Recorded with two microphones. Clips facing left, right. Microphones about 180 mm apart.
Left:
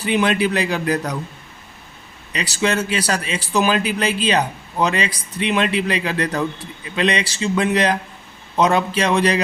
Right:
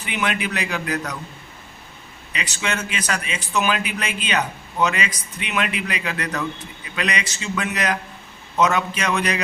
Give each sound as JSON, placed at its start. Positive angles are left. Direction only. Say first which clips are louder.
{"t": 0.0, "sound": "a man's voice", "louder": "left 7 dB", "side_deg": 35}
{"t": 2.3, "sound": "a man's voice", "louder": "left 7 dB", "side_deg": 35}